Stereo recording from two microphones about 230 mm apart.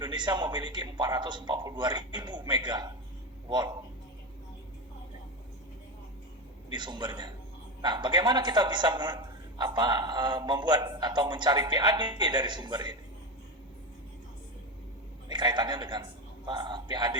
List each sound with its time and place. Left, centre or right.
0.0 s a man's voice: centre
6.7 s a man's voice: centre
15.3 s a man's voice: centre